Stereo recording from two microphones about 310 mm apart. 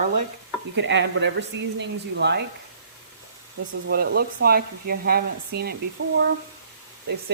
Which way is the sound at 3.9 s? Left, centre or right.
Right.